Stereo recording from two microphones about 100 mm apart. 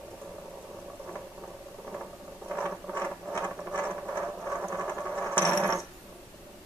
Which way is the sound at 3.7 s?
15° left (ahead or behind).